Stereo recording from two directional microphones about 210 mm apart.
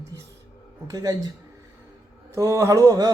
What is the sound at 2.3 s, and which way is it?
Speech, 15° right (ahead or behind).